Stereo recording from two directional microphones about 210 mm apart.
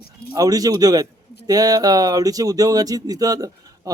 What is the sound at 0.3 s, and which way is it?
Speech, 15° right (ahead or behind).